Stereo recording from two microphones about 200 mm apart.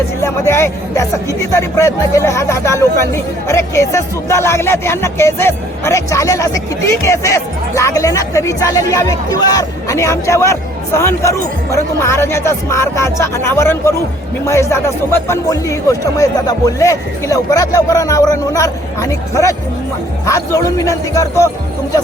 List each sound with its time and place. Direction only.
0.2 s speech: 10° left (ahead or behind)